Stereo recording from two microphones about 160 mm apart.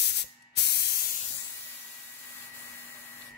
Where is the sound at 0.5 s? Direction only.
90° left.